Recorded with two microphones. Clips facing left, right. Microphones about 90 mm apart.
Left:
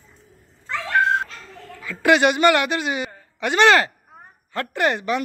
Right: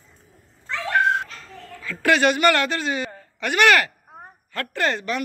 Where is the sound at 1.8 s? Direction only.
20° left (ahead or behind).